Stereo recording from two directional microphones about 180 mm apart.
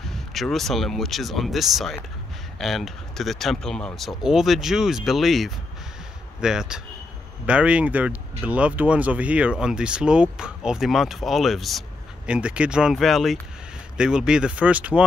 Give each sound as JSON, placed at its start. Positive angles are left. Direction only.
{"t": 0.0, "sound": "speech", "side_deg": 0}